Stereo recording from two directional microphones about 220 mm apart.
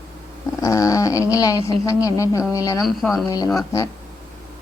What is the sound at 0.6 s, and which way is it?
A woman's voice, 15° left (ahead or behind).